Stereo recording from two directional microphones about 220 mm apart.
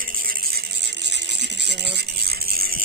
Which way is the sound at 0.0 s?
40° right (ahead or behind).